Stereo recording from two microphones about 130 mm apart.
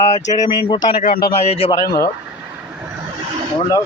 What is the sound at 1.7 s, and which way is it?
Speech, 25° left (ahead or behind).